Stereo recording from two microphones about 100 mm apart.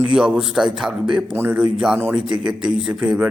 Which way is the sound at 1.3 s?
20° right (ahead or behind).